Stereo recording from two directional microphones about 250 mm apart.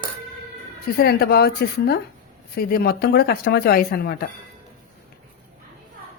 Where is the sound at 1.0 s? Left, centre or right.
Left.